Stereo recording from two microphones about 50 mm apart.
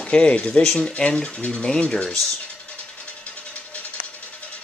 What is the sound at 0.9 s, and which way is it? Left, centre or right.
Speech, centre.